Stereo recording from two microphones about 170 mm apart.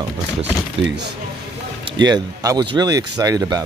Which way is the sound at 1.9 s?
25° right (ahead or behind).